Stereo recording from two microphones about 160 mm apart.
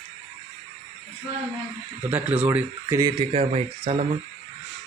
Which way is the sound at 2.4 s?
15° right (ahead or behind).